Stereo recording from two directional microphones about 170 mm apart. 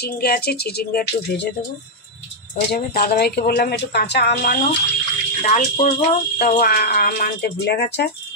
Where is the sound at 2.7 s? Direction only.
65° left (ahead or behind).